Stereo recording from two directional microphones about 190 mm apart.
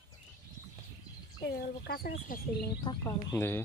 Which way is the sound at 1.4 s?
60° left (ahead or behind).